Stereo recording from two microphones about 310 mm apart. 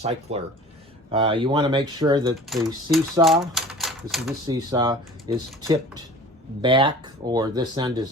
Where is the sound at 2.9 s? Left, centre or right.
Centre.